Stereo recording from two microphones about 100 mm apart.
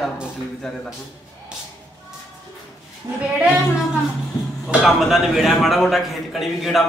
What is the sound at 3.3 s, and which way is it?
A man's voice, 5° right (ahead or behind).